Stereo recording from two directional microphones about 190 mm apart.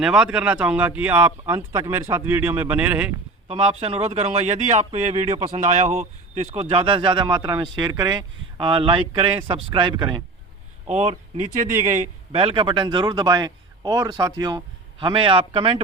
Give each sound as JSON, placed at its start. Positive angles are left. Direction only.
{"t": 0.0, "sound": "speech", "side_deg": -5}
{"t": 3.5, "sound": "speech", "side_deg": -30}
{"t": 10.8, "sound": "speech", "side_deg": -35}
{"t": 12.3, "sound": "speech", "side_deg": -30}